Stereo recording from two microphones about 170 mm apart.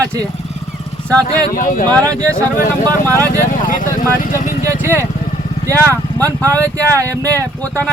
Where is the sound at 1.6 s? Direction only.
55° left (ahead or behind).